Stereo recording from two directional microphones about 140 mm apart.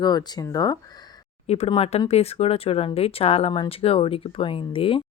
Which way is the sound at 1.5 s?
45° left (ahead or behind).